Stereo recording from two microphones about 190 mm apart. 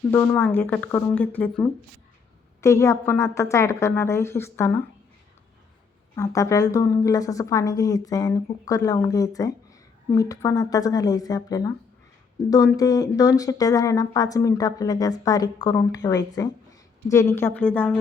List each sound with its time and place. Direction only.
0.3 s a woman's voice: 5° left (ahead or behind)
6.1 s a woman's voice: 15° left (ahead or behind)